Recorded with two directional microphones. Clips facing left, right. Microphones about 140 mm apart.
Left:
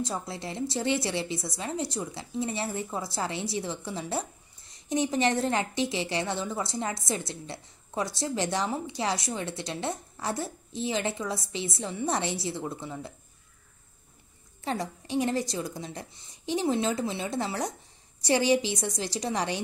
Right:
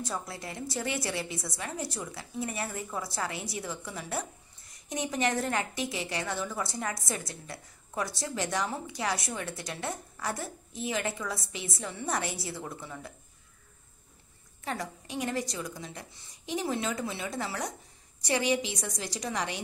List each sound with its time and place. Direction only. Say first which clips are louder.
0.0 s a woman's voice: left 3 dB; 25° left (ahead or behind)
14.6 s a woman's voice: left 4 dB; 30° left (ahead or behind)